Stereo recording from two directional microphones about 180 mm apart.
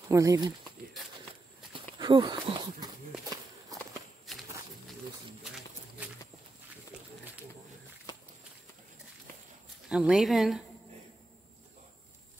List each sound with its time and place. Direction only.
0.1 s speech: 20° right (ahead or behind)
2.0 s speech: 25° right (ahead or behind)
3.7 s walk: 20° right (ahead or behind)
4.3 s walk: centre (ahead or behind)
5.4 s a sound: centre (ahead or behind)
9.8 s speech: 5° right (ahead or behind)